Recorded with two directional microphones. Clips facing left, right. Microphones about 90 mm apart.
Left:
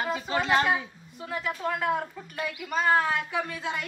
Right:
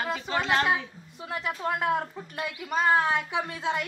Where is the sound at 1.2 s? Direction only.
20° right (ahead or behind).